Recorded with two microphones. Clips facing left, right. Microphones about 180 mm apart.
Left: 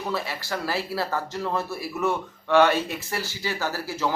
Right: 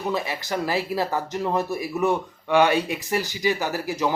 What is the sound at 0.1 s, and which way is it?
Speech, 15° right (ahead or behind).